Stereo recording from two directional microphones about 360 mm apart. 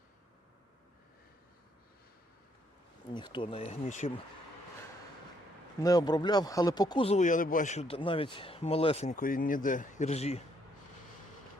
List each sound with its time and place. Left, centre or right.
3.1 s speech: centre
5.8 s speech: centre